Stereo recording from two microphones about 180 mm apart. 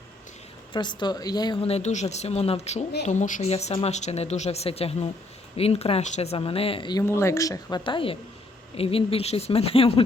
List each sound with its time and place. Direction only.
0.7 s speech: 25° left (ahead or behind)
1.6 s speech: 35° left (ahead or behind)
7.0 s speech: 15° left (ahead or behind); by 10.0 s 30° left (ahead or behind)